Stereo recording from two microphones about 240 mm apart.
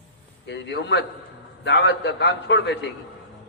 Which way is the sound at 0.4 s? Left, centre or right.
Left.